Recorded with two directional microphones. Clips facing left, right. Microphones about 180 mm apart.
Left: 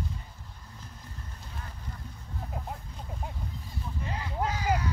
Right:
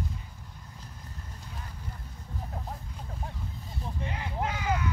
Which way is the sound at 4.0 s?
35° left (ahead or behind).